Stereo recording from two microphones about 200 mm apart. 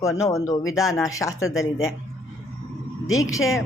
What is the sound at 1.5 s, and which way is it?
Speech, centre (ahead or behind).